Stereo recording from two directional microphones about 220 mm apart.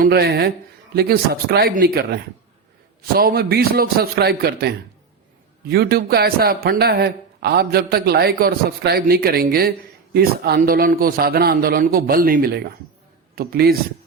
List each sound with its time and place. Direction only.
0.0 s speech: 45° right (ahead or behind)